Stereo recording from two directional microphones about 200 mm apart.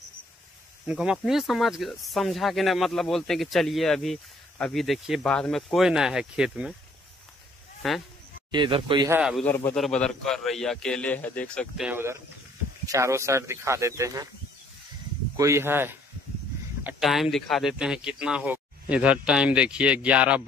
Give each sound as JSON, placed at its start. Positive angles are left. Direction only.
{"t": 0.8, "sound": "speech", "side_deg": -5}
{"t": 7.8, "sound": "speech", "side_deg": 0}
{"t": 8.5, "sound": "a man's voice", "side_deg": -25}
{"t": 9.1, "sound": "speech", "side_deg": 0}
{"t": 9.5, "sound": "a man's voice", "side_deg": 10}
{"t": 15.3, "sound": "speech", "side_deg": -15}